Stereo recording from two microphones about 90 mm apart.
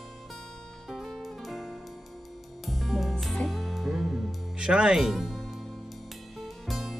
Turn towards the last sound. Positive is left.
turn(degrees=0)  # may be behind; listen again after turning